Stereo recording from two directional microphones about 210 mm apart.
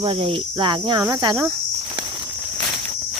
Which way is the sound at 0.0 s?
25° right (ahead or behind).